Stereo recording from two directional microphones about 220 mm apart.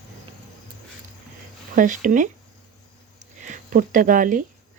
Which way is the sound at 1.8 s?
35° right (ahead or behind).